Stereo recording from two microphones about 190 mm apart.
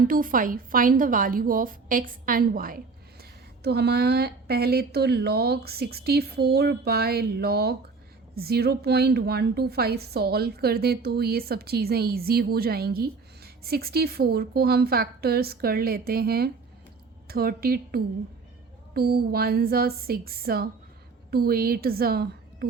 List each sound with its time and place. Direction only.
0.1 s a woman's voice: 45° right (ahead or behind)